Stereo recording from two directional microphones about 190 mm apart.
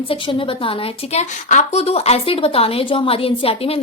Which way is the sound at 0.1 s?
25° left (ahead or behind).